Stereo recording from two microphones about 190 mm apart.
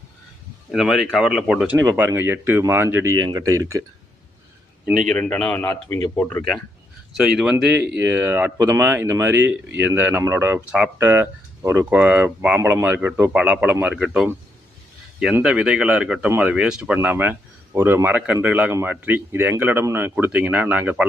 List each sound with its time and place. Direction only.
0.7 s speech: centre (ahead or behind)
4.9 s speech: 5° left (ahead or behind)
6.3 s speech: centre (ahead or behind)